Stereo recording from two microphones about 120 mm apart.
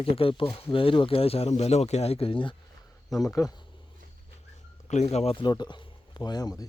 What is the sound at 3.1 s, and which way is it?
Speech, 30° left (ahead or behind).